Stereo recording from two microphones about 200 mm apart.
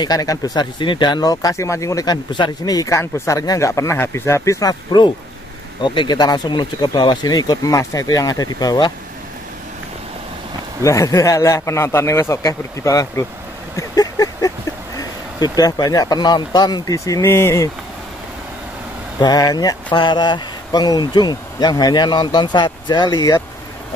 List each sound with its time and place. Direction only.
0.0 s speech: 20° left (ahead or behind)
10.8 s speech: 15° left (ahead or behind)
13.7 s a sound: 20° left (ahead or behind)
15.0 s speech: 20° left (ahead or behind)
19.2 s speech: 20° left (ahead or behind)